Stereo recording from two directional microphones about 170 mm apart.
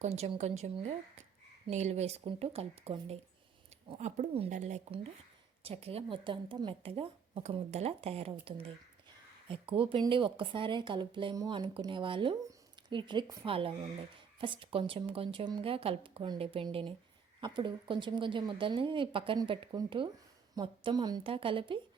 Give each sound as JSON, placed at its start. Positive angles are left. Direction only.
{"t": 0.0, "sound": "a woman's voice", "side_deg": -40}